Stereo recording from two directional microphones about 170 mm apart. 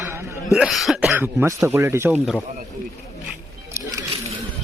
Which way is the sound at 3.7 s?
20° right (ahead or behind).